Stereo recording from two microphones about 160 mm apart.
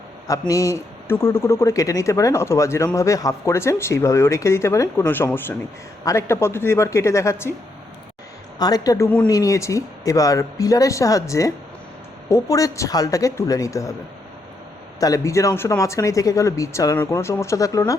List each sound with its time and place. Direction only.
0.3 s a man's voice: 20° left (ahead or behind)
8.5 s speech: 25° left (ahead or behind)
15.0 s speech: 20° left (ahead or behind)